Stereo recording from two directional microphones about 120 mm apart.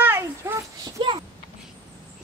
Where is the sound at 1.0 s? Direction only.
40° right (ahead or behind).